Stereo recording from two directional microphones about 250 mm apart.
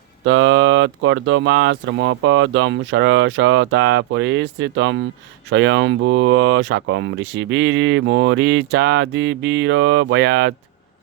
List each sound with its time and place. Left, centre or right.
0.3 s speech: right